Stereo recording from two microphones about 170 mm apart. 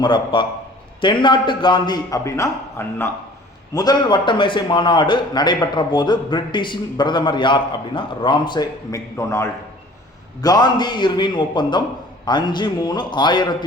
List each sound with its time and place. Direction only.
0.0 s a man's voice: 25° left (ahead or behind)